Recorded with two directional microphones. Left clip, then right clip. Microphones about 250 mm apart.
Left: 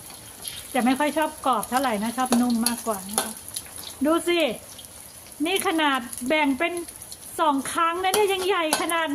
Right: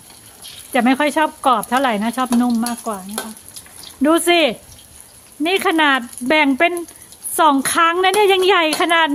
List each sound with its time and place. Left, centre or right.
0.7 s speech: right
4.0 s speech: right